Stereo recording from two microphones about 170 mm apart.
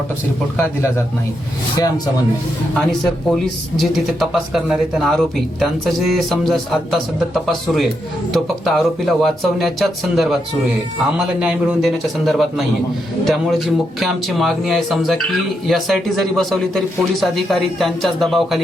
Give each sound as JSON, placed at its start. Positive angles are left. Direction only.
{"t": 0.5, "sound": "speech", "side_deg": 15}
{"t": 3.0, "sound": "speech", "side_deg": 0}
{"t": 11.3, "sound": "speech", "side_deg": -5}